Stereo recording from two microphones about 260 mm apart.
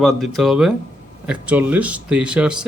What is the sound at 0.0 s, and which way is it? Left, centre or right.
Speech, centre.